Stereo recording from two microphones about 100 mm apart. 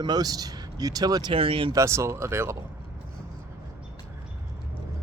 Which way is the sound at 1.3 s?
65° right (ahead or behind).